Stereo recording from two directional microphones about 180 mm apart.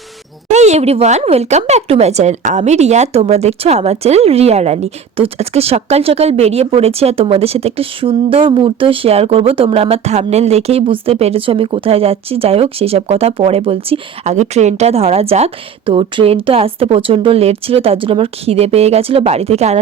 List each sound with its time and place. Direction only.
0.5 s speech: 40° right (ahead or behind)